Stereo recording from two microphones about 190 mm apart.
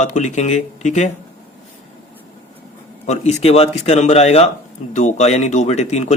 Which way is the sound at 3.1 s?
35° left (ahead or behind).